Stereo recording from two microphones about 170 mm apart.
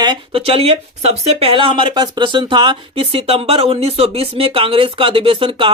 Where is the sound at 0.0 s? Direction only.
30° right (ahead or behind).